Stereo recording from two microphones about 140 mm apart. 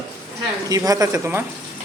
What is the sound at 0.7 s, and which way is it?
Speech, 25° right (ahead or behind).